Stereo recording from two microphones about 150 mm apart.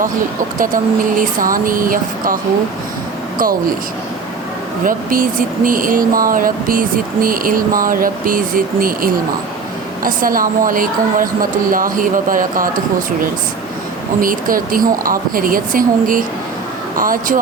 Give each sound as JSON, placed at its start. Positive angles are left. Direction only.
{"t": 0.6, "sound": "speech", "side_deg": -65}
{"t": 4.9, "sound": "speech", "side_deg": -65}
{"t": 14.2, "sound": "speech", "side_deg": -70}